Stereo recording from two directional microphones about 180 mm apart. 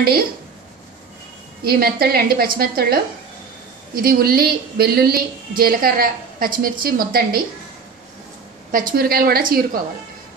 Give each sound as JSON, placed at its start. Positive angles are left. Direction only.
{"t": 1.6, "sound": "a woman's voice", "side_deg": -55}
{"t": 8.7, "sound": "a woman's voice", "side_deg": -55}